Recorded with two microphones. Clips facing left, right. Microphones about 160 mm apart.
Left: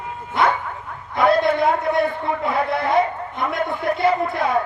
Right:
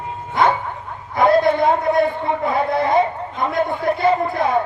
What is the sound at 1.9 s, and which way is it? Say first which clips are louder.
A man's voice: right 3 dB; 20° right (ahead or behind).